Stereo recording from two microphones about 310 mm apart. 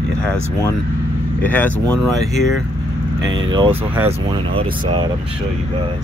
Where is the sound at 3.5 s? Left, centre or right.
Centre.